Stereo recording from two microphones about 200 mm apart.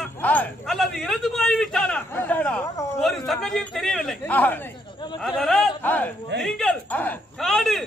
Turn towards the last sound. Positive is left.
turn(degrees=0)  # may be behind; listen again after turning